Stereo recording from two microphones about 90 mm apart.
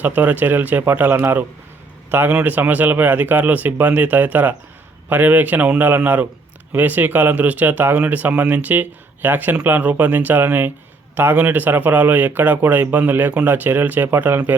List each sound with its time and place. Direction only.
0.0 s a man's voice: 15° right (ahead or behind)